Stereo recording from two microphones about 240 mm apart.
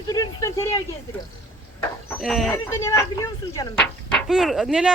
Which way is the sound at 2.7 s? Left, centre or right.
Centre.